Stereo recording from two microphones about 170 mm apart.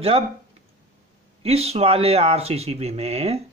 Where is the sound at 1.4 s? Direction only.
35° right (ahead or behind).